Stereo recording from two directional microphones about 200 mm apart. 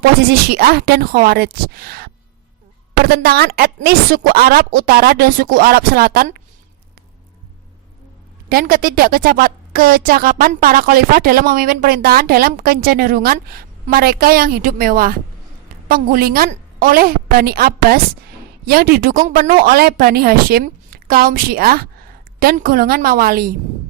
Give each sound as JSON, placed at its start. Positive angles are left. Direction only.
{"t": 0.3, "sound": "a woman's voice", "side_deg": -50}
{"t": 8.4, "sound": "a woman's voice", "side_deg": -45}